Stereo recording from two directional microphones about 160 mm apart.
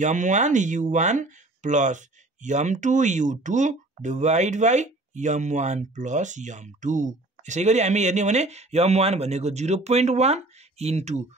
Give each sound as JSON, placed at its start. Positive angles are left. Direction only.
{"t": 0.0, "sound": "speech", "side_deg": -50}